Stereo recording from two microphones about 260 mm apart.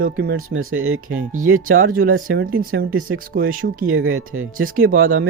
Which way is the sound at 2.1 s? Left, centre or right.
Right.